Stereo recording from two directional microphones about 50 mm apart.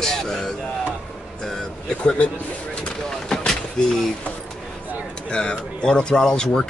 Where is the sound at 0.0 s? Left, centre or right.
Centre.